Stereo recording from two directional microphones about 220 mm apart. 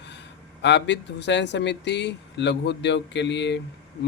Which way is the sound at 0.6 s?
50° left (ahead or behind).